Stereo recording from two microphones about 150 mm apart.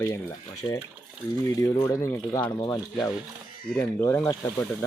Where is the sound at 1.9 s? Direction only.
20° left (ahead or behind).